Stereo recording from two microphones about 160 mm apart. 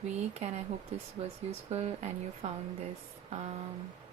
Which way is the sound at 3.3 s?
40° right (ahead or behind).